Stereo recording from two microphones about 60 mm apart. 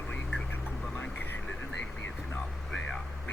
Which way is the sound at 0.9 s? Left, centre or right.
Left.